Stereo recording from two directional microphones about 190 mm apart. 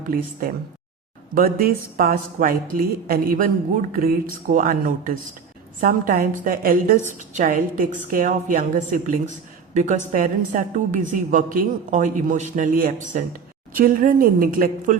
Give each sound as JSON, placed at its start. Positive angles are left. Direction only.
{"t": 0.0, "sound": "a woman's voice", "side_deg": -45}